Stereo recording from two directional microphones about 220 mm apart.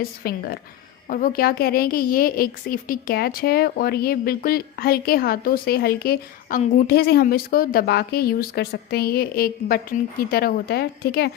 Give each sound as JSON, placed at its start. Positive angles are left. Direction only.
{"t": 0.0, "sound": "a woman's voice", "side_deg": 45}